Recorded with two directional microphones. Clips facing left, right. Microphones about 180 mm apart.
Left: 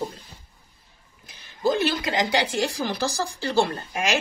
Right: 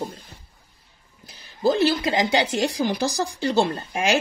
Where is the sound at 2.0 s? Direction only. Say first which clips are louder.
Right 2 dB; 25° right (ahead or behind).